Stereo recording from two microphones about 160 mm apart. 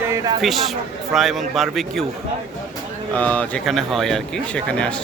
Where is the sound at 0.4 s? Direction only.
Centre (ahead or behind).